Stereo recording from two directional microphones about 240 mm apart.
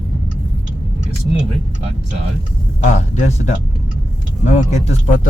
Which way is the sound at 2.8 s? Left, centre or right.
Left.